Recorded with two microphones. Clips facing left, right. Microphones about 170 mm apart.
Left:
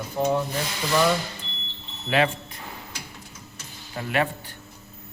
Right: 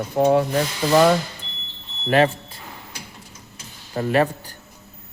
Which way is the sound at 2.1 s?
40° right (ahead or behind).